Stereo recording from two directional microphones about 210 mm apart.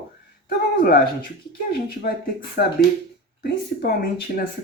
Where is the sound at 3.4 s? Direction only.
50° left (ahead or behind).